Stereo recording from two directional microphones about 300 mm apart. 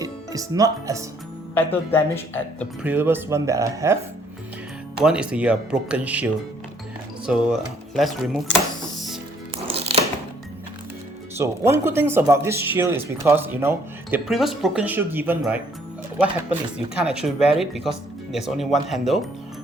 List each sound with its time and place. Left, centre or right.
0.0 s speech: centre
1.5 s speech: centre
2.8 s speech: centre
4.9 s speech: centre
7.9 s speech: centre
8.8 s music: centre
9.7 s music: centre
11.3 s speech: centre